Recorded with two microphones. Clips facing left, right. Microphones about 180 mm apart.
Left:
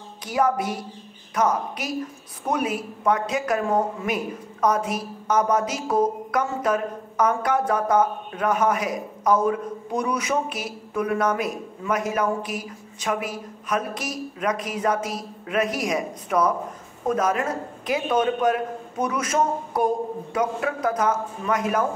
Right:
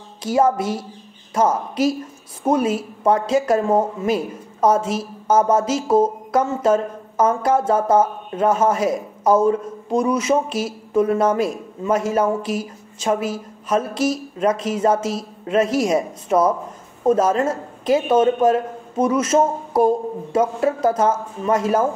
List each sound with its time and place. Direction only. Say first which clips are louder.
0.2 s speech: right 5 dB; 25° right (ahead or behind)